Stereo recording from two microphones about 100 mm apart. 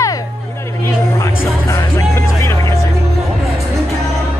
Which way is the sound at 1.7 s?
30° left (ahead or behind).